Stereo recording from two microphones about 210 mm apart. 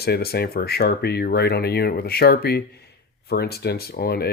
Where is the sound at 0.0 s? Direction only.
50° left (ahead or behind).